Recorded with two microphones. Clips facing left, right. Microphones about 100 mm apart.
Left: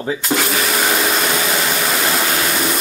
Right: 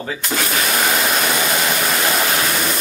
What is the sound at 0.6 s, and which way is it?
Vacuum cleaner, centre (ahead or behind).